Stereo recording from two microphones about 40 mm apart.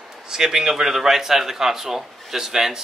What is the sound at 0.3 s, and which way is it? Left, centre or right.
A man's voice, centre.